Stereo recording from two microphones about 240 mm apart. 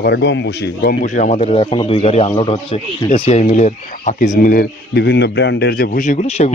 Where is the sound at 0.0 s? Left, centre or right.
Left.